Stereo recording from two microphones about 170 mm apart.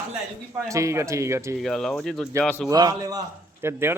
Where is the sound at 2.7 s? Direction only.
20° right (ahead or behind).